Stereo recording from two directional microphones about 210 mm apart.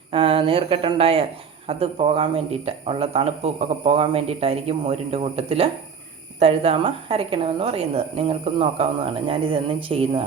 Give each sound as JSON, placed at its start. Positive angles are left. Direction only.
{"t": 0.1, "sound": "speech", "side_deg": -25}